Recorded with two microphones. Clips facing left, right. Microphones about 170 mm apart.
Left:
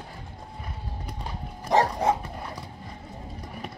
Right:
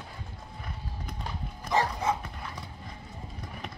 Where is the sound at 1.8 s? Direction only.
40° left (ahead or behind).